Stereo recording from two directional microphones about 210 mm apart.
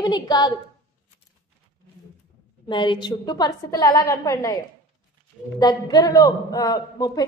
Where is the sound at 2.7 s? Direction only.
20° left (ahead or behind).